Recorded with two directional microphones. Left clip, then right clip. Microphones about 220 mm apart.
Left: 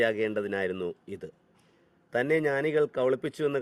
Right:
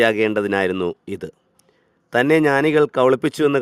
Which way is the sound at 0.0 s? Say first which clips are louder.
Right 10 dB; 45° right (ahead or behind).